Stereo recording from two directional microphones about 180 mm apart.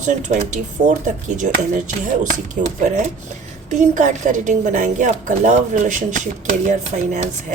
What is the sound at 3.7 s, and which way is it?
A woman's voice, 45° right (ahead or behind).